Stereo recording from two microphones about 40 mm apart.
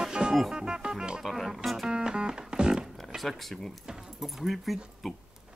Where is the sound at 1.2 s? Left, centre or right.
Centre.